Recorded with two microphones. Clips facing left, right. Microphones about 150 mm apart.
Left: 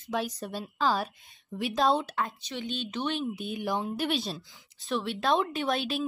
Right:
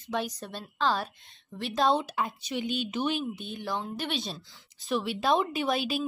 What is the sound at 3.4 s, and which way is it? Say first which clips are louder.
Speech: left 3 dB; 5° left (ahead or behind).